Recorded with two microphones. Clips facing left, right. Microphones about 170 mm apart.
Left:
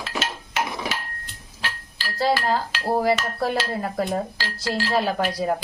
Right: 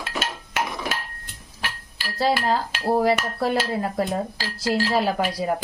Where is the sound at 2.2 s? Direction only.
Centre (ahead or behind).